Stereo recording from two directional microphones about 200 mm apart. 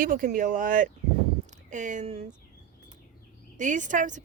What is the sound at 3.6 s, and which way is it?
Speech, 40° right (ahead or behind).